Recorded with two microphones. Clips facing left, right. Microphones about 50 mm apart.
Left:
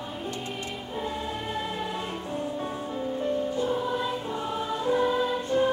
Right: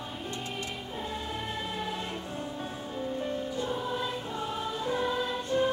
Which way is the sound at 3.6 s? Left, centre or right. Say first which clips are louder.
Left 5 dB; centre.